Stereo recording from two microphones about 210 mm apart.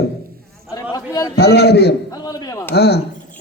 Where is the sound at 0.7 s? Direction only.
15° left (ahead or behind).